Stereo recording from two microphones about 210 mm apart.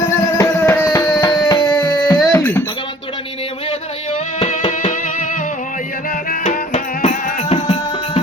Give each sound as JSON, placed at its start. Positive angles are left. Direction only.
{"t": 0.3, "sound": "music", "side_deg": 15}
{"t": 1.5, "sound": "music", "side_deg": 25}
{"t": 1.7, "sound": "music", "side_deg": 10}
{"t": 3.7, "sound": "music", "side_deg": 30}